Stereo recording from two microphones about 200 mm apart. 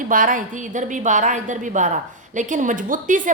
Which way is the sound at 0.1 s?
40° right (ahead or behind).